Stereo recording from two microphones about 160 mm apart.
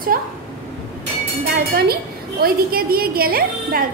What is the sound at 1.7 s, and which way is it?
A woman's voice, 75° right (ahead or behind).